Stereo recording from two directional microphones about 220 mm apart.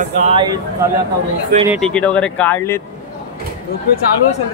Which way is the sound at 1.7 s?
5° left (ahead or behind).